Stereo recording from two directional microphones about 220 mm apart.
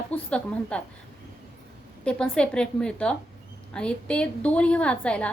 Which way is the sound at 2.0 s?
5° left (ahead or behind).